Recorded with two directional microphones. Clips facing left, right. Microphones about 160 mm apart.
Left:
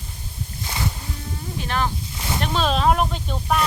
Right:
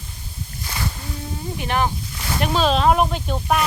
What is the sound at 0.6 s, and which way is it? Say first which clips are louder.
Boat: left 1 dB; 20° left (ahead or behind).